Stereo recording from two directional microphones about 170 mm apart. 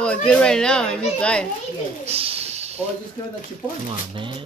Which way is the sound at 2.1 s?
35° right (ahead or behind).